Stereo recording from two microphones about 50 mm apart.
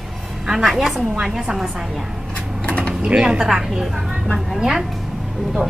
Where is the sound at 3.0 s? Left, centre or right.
Centre.